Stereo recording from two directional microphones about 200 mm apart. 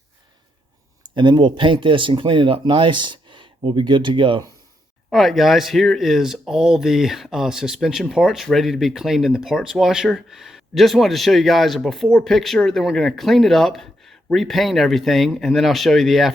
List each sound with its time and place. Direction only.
1.1 s speech: 25° right (ahead or behind)
5.1 s speech: centre (ahead or behind)